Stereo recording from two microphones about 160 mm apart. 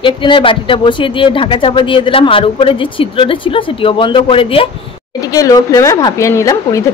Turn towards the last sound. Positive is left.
turn(degrees=20)  # may be behind; listen again after turning